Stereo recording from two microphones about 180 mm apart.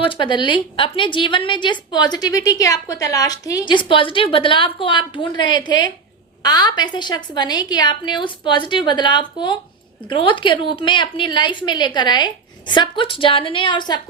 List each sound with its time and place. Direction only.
0.0 s a woman's voice: 30° left (ahead or behind)